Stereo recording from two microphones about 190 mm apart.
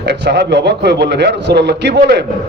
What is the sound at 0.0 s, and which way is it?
A man's voice, 60° right (ahead or behind).